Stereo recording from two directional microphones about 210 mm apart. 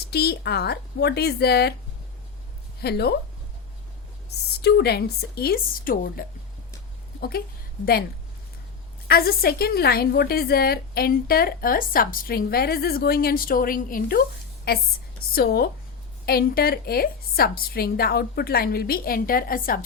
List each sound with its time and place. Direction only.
0.1 s a woman's voice: 50° left (ahead or behind)
2.8 s a woman's voice: 50° left (ahead or behind)
4.6 s a woman's voice: 50° left (ahead or behind)
9.0 s a woman's voice: 45° left (ahead or behind)